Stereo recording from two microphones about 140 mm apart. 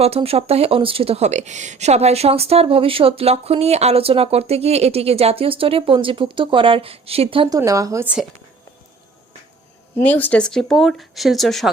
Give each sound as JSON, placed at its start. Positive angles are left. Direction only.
{"t": 0.0, "sound": "speech", "side_deg": -45}
{"t": 7.5, "sound": "speech", "side_deg": -25}
{"t": 8.0, "sound": "speech", "side_deg": -5}
{"t": 10.0, "sound": "speech", "side_deg": 10}